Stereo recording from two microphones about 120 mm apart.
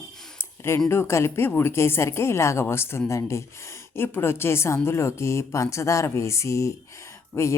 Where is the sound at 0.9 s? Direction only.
20° left (ahead or behind).